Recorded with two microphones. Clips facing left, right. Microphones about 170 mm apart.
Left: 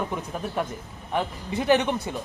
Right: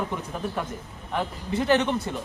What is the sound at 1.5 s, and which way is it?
Speech, 15° left (ahead or behind).